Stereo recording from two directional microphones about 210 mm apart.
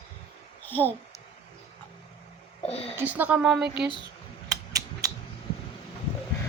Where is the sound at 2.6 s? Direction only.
30° left (ahead or behind).